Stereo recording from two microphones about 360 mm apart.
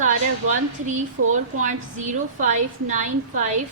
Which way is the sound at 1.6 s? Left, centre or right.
Centre.